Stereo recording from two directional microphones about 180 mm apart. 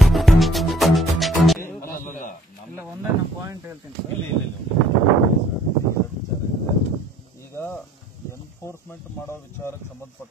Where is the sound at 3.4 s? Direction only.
20° right (ahead or behind).